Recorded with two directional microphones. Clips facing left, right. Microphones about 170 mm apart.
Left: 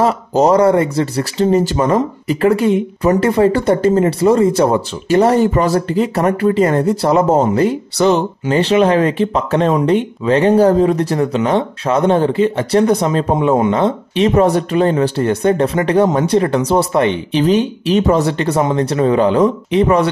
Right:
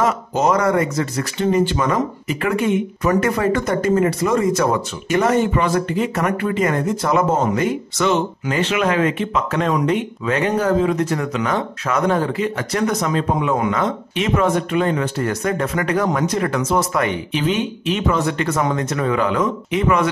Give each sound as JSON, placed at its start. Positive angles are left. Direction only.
{"t": 0.0, "sound": "speech", "side_deg": 35}